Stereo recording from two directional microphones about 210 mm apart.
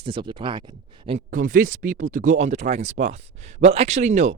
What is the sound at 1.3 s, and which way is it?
Speech, 40° right (ahead or behind).